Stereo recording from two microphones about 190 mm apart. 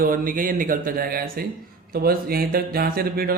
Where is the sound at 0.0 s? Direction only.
45° right (ahead or behind).